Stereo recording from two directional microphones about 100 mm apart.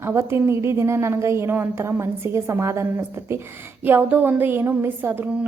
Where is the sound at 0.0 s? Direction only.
25° right (ahead or behind).